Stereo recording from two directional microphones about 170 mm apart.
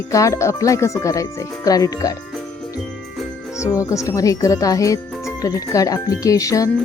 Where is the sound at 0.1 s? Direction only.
20° left (ahead or behind).